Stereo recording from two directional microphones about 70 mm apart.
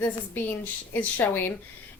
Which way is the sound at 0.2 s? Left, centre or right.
Left.